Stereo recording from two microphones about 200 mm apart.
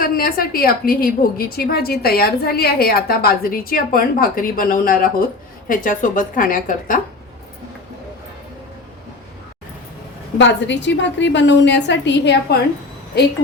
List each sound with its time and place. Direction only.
0.0 s a woman's voice: 45° left (ahead or behind)
10.3 s a woman's voice: 65° left (ahead or behind)